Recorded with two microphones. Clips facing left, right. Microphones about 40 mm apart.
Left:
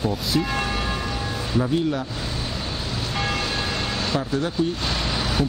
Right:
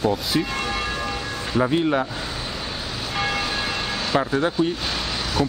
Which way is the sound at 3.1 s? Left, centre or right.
Centre.